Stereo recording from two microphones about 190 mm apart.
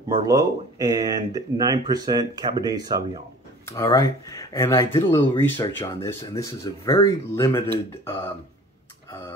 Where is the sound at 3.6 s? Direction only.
15° left (ahead or behind).